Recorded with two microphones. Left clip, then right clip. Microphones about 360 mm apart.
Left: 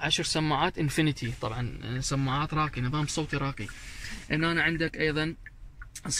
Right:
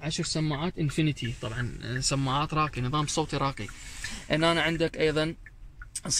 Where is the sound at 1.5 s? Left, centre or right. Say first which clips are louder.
Right 2 dB; centre.